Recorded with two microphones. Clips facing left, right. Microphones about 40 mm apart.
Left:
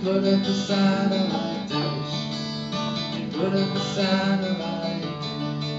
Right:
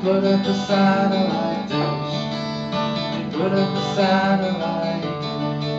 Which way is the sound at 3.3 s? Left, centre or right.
Centre.